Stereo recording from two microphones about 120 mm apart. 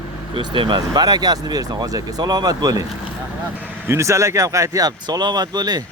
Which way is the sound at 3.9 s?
25° right (ahead or behind).